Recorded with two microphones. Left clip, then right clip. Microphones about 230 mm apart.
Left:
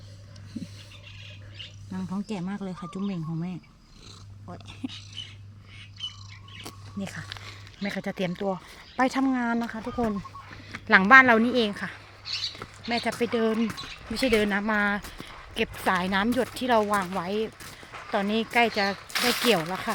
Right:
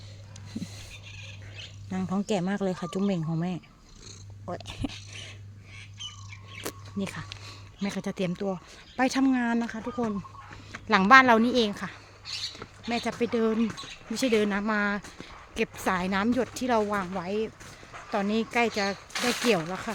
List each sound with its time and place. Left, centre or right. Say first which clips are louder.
1.9 s speech: right 7 dB; right
6.7 s a sound: right 8 dB; right
7.0 s speech: right 1 dB; right
7.8 s speech: left 1 dB; centre
10.8 s speech: left 2 dB; centre
19.1 s speech: left 4 dB; left
19.5 s speech: left 2 dB; centre